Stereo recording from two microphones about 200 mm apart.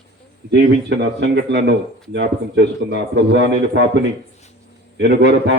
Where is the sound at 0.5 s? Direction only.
60° right (ahead or behind).